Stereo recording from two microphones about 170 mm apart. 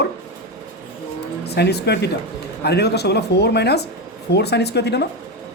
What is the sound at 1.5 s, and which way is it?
Speech, 75° left (ahead or behind).